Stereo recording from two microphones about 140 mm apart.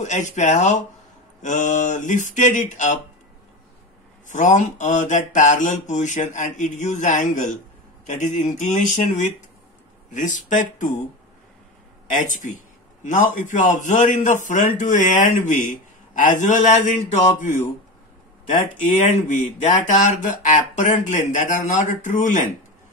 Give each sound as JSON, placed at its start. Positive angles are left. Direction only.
{"t": 0.0, "sound": "a man's voice", "side_deg": 60}
{"t": 4.3, "sound": "a man's voice", "side_deg": 60}
{"t": 12.1, "sound": "a man's voice", "side_deg": 65}
{"t": 18.8, "sound": "a man's voice", "side_deg": 55}